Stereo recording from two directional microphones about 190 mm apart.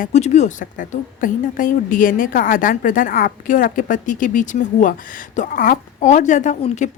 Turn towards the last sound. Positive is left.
turn(degrees=40)  # may be behind; listen again after turning